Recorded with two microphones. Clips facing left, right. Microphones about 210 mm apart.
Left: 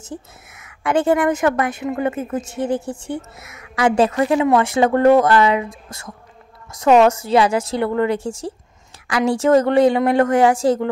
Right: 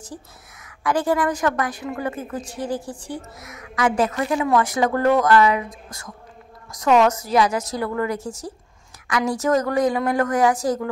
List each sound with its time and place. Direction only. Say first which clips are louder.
0.0 s a woman's voice: left 5 dB; 25° left (ahead or behind)